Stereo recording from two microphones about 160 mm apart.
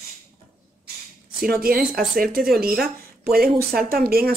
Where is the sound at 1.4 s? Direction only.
70° right (ahead or behind).